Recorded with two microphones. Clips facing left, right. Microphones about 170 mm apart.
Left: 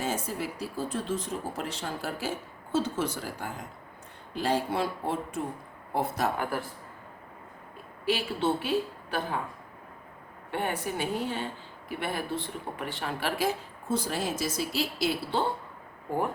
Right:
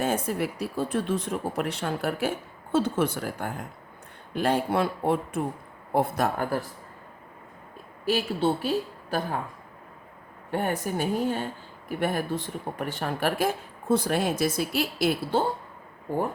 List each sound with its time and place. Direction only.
0.0 s speech: 60° right (ahead or behind)
8.0 s a woman's voice: 40° right (ahead or behind)
10.5 s speech: 45° right (ahead or behind)